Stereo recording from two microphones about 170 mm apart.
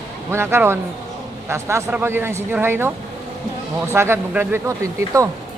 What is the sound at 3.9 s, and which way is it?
Speech, 15° right (ahead or behind).